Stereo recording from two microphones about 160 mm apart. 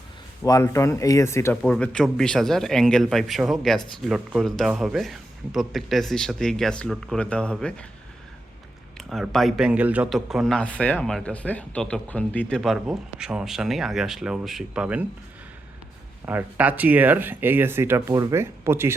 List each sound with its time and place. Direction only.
0.4 s speech: 20° left (ahead or behind)
1.6 s speech: 5° left (ahead or behind)
9.0 s speech: centre (ahead or behind)
16.2 s speech: 10° right (ahead or behind)